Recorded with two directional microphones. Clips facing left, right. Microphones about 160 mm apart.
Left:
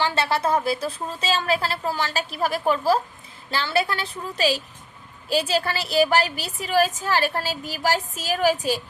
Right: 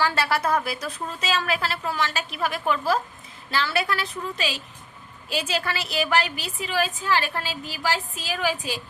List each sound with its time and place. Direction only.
0.0 s a woman's voice: 25° left (ahead or behind); by 8.8 s 40° left (ahead or behind)